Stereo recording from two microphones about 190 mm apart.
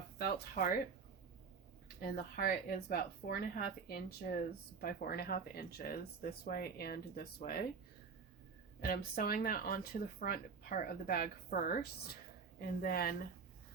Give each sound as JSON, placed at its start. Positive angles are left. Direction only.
{"t": 0.2, "sound": "speech", "side_deg": 50}
{"t": 2.0, "sound": "speech", "side_deg": 50}
{"t": 8.8, "sound": "speech", "side_deg": 50}